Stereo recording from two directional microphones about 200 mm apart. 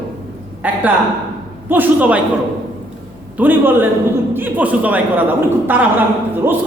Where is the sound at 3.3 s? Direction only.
10° right (ahead or behind).